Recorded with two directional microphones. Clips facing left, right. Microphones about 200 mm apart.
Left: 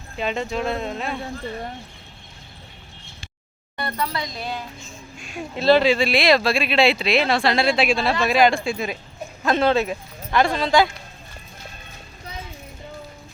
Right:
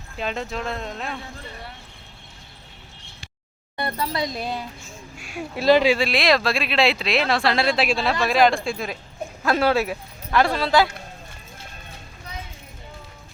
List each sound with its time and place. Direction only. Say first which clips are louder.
0.2 s speech: left 3 dB; centre (ahead or behind)
3.8 s speech: right 1 dB; 20° right (ahead or behind)
4.5 s speech: right 1 dB; 10° right (ahead or behind)
6.1 s speech: left 2 dB; centre (ahead or behind)